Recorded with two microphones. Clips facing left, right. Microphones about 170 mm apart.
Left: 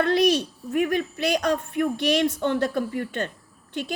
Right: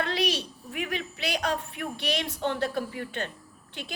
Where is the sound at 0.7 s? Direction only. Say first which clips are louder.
Left 10 dB; 45° left (ahead or behind).